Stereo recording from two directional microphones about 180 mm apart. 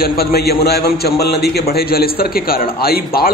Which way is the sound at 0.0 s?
60° left (ahead or behind).